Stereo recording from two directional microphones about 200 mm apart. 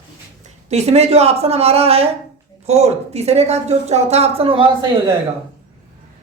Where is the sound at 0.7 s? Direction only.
35° right (ahead or behind).